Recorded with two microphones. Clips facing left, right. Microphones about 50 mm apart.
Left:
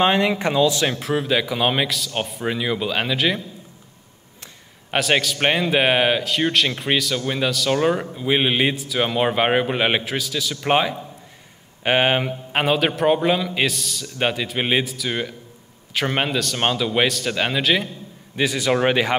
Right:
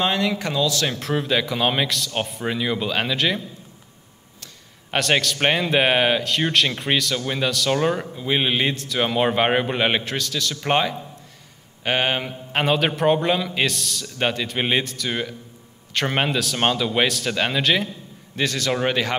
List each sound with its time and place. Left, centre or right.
0.0 s speech: left
0.9 s speech: centre
4.9 s speech: centre